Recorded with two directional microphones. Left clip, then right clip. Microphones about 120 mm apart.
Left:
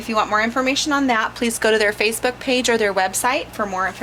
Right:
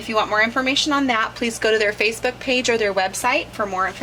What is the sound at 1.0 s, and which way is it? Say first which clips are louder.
A woman's voice: left 1 dB; 45° left (ahead or behind).